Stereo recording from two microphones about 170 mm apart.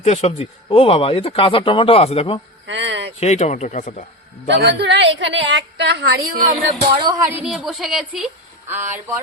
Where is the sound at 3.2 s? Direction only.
45° left (ahead or behind).